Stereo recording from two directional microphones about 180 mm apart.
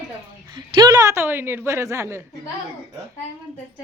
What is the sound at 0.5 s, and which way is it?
A woman's voice, 25° right (ahead or behind).